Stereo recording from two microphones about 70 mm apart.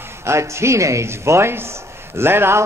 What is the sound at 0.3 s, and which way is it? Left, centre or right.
A man's voice, right.